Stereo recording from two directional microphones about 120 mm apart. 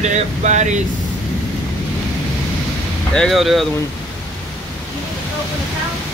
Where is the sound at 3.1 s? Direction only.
5° left (ahead or behind).